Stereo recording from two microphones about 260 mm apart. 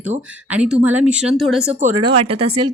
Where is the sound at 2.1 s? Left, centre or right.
Right.